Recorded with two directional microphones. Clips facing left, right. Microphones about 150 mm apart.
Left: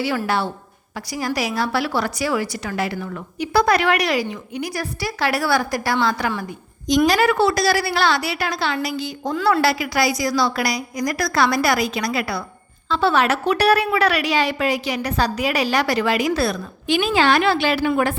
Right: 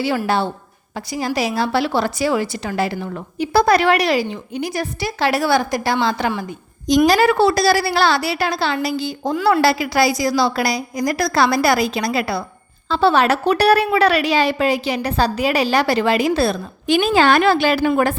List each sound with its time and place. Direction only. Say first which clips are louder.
0.3 s a woman's voice: right 3 dB; 25° right (ahead or behind)
16.8 s a woman's voice: right 3 dB; 40° right (ahead or behind)